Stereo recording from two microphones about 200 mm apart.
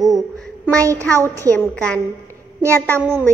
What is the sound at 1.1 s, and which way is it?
Speech, 15° right (ahead or behind).